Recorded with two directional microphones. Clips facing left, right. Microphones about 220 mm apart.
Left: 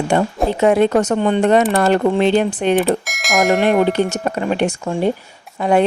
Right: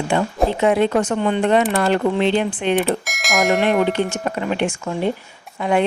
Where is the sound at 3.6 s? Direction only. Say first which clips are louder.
Left 3 dB; 45° left (ahead or behind).